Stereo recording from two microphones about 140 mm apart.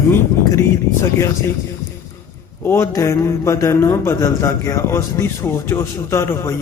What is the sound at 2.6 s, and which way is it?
Speech, 20° left (ahead or behind).